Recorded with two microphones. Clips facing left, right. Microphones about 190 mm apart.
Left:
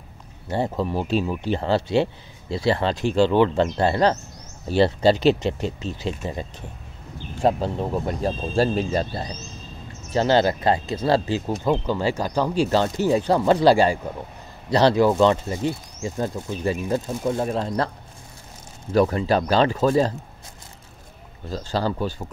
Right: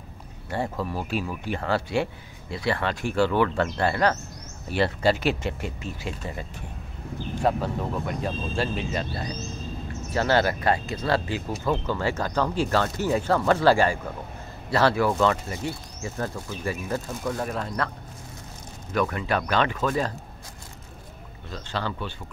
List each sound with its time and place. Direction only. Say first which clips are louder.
0.5 s speech: left 5 dB; 25° left (ahead or behind)
7.4 s speech: left 4 dB; 30° left (ahead or behind)
11.6 s speech: left 3 dB; 15° left (ahead or behind); by 17.9 s 30° left (ahead or behind)
18.9 s speech: left 6 dB; 30° left (ahead or behind)
21.5 s speech: left 6 dB; 35° left (ahead or behind)